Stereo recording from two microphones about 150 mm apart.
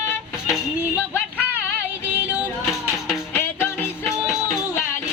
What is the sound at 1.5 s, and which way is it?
Music, 10° right (ahead or behind).